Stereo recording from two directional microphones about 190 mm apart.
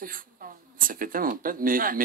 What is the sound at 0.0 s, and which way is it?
Speech, 50° right (ahead or behind).